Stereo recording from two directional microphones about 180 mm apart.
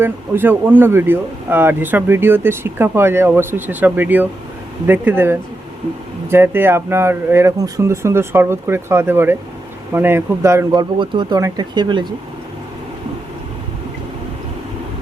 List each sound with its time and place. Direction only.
0.0 s speech: 10° right (ahead or behind)